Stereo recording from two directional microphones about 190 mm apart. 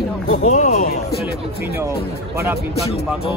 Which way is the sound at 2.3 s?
15° right (ahead or behind).